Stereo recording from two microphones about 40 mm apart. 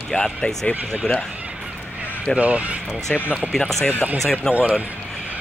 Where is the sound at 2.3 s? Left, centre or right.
Right.